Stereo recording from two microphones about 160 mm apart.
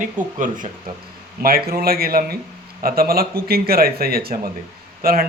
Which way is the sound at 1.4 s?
70° right (ahead or behind).